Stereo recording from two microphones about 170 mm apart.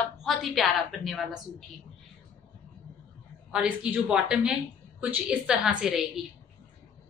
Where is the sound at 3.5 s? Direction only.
5° right (ahead or behind).